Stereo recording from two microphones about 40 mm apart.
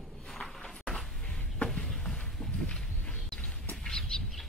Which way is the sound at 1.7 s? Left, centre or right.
Centre.